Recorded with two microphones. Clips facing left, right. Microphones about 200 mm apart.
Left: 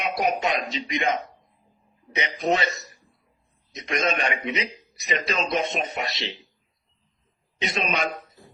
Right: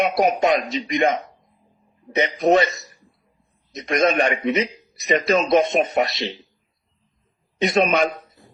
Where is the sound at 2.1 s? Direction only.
55° right (ahead or behind).